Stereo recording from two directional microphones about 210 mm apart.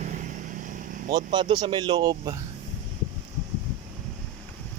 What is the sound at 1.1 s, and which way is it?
Speech, 20° right (ahead or behind).